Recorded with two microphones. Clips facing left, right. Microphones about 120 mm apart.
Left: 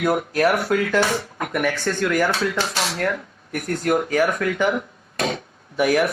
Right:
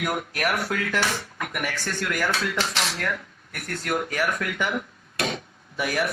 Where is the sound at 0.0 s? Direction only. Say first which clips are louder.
Left 8 dB; 25° left (ahead or behind).